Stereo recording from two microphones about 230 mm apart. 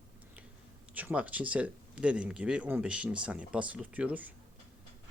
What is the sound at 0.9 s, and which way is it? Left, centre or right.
Speech, centre.